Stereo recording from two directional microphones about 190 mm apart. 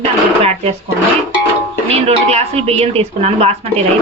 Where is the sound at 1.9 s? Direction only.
35° right (ahead or behind).